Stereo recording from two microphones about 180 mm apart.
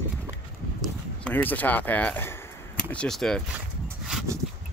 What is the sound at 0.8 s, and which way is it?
Speech, 5° left (ahead or behind).